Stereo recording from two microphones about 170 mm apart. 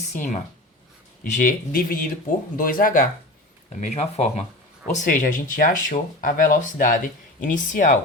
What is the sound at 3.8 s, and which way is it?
Speech, 40° left (ahead or behind).